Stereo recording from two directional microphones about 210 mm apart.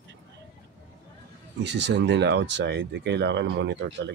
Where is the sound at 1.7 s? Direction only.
55° right (ahead or behind).